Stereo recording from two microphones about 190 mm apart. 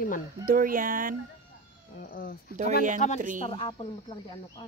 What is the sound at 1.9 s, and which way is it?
Speech, 50° left (ahead or behind).